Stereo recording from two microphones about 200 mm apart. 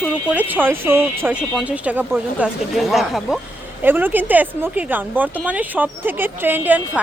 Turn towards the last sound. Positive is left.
turn(degrees=-10)  # may be behind; listen again after turning